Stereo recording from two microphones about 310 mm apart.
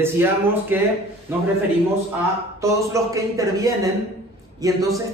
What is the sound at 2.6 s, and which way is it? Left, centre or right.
A man's voice, centre.